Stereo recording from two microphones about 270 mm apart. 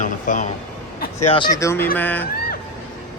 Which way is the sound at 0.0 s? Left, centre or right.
Left.